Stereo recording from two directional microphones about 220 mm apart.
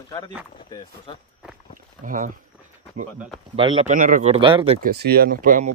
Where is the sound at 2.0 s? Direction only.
35° right (ahead or behind).